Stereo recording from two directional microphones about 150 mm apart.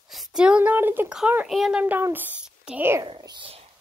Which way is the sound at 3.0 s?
30° right (ahead or behind).